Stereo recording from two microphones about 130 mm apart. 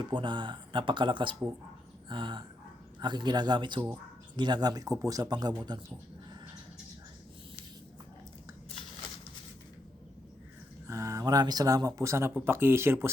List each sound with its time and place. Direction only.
0.0 s speech: 35° right (ahead or behind)
10.8 s speech: 25° right (ahead or behind)